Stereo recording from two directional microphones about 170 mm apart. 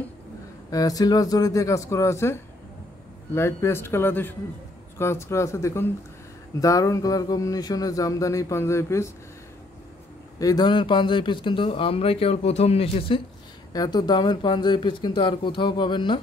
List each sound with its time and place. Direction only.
0.7 s speech: 20° left (ahead or behind)
10.4 s a man's voice: 25° left (ahead or behind)
13.7 s speech: 25° left (ahead or behind)